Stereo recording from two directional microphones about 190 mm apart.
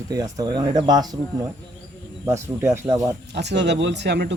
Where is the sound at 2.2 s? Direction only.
15° right (ahead or behind).